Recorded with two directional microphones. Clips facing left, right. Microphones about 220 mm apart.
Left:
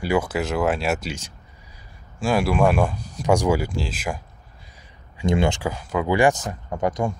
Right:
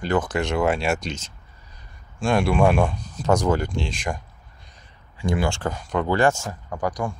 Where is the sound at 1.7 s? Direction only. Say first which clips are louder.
Left 1 dB; 5° left (ahead or behind).